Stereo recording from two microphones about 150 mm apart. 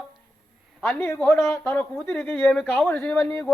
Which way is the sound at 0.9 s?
15° left (ahead or behind).